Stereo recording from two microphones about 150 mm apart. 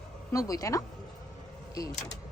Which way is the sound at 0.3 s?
25° left (ahead or behind).